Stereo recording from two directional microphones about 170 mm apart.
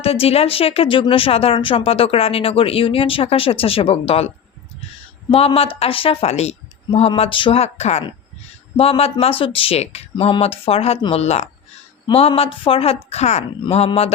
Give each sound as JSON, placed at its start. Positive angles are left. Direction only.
{"t": 0.0, "sound": "speech", "side_deg": 35}
{"t": 5.3, "sound": "speech", "side_deg": 35}